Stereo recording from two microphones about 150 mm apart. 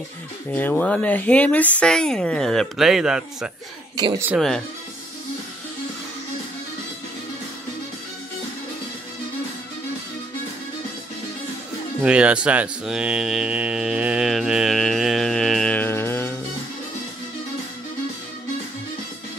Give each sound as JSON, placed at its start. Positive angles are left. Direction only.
{"t": 0.5, "sound": "speech", "side_deg": 10}
{"t": 3.9, "sound": "speech", "side_deg": -30}
{"t": 4.4, "sound": "speech", "side_deg": 0}
{"t": 12.0, "sound": "speech", "side_deg": -10}